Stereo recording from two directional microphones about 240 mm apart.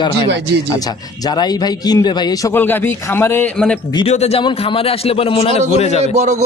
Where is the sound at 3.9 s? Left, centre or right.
Left.